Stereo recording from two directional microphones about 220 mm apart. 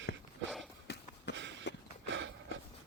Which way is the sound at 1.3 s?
55° right (ahead or behind).